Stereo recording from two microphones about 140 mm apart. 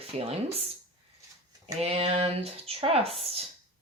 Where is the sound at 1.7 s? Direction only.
45° right (ahead or behind).